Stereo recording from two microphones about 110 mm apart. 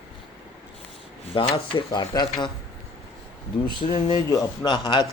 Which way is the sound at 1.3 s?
60° left (ahead or behind).